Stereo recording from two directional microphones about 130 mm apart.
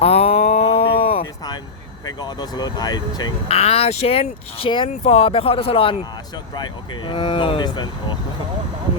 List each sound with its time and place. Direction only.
0.0 s a sound: 50° left (ahead or behind)
2.0 s speech: 30° left (ahead or behind)
3.5 s speech: 50° left (ahead or behind)
4.9 s speech: 55° left (ahead or behind); by 8.2 s 35° left (ahead or behind)